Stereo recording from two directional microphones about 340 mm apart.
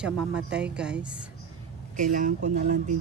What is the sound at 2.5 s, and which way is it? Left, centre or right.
Speech, right.